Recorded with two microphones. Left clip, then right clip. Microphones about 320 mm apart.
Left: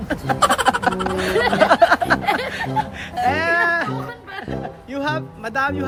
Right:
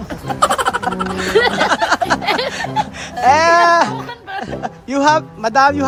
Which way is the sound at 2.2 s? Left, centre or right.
Centre.